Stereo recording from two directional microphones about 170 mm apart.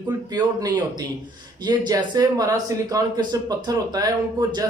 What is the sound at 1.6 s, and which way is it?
Speech, 25° right (ahead or behind).